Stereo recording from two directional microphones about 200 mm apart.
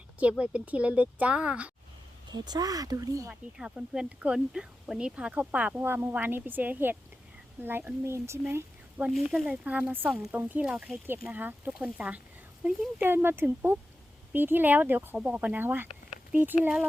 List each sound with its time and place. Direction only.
0.2 s speech: 5° right (ahead or behind)
2.3 s speech: 20° right (ahead or behind)
3.6 s speech: 5° right (ahead or behind)